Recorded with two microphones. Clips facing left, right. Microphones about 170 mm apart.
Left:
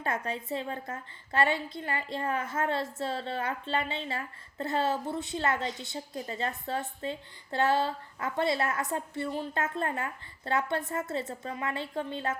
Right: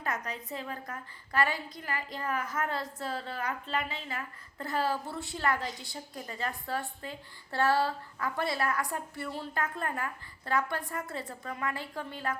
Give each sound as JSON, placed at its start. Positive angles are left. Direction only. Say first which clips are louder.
{"t": 0.0, "sound": "a woman's voice", "louder": "left 3 dB", "side_deg": 30}